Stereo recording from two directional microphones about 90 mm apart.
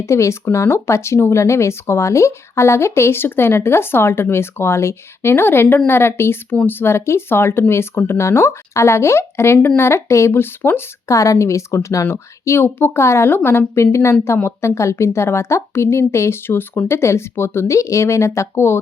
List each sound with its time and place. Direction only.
0.0 s speech: 30° left (ahead or behind)
11.1 s a woman's voice: 35° left (ahead or behind)